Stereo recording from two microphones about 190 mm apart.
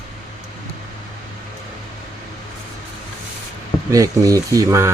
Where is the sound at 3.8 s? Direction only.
15° right (ahead or behind).